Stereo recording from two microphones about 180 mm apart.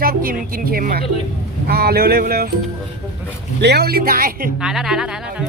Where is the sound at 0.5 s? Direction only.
55° right (ahead or behind).